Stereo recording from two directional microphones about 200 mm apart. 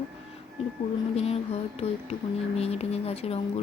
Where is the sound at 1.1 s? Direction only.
30° left (ahead or behind).